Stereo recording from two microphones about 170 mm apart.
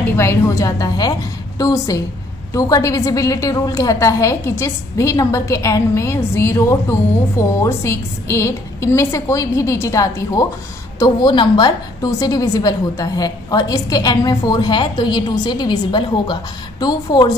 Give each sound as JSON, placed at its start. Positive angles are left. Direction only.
{"t": 0.1, "sound": "a woman's voice", "side_deg": 15}